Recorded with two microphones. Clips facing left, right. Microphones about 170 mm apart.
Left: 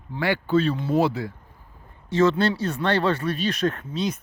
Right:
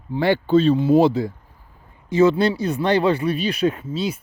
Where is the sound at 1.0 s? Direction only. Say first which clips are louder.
Right 6 dB; 20° right (ahead or behind).